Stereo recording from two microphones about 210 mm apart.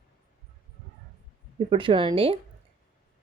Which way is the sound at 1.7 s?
25° right (ahead or behind).